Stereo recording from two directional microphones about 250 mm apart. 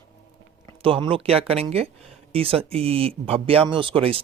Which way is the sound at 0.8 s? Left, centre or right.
Right.